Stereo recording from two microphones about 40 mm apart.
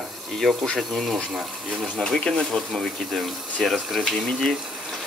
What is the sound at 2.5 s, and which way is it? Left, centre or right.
Speech, centre.